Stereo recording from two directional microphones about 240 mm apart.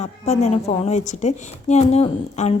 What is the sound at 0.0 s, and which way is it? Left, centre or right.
A woman's voice, left.